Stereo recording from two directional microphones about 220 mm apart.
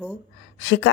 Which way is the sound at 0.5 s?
60° left (ahead or behind).